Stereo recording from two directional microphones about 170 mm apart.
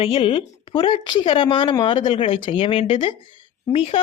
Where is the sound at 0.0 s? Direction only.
30° left (ahead or behind).